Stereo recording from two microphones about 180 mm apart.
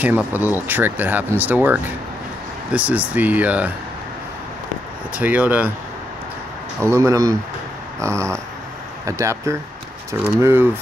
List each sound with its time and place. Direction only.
0.0 s speech: 10° right (ahead or behind)
5.1 s speech: 10° right (ahead or behind)
6.8 s speech: 15° right (ahead or behind)